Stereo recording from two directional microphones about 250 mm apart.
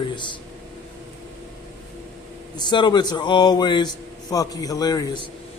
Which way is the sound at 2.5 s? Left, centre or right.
Centre.